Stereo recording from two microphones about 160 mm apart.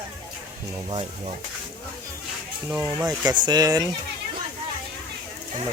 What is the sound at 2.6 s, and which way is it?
Speech, 15° right (ahead or behind).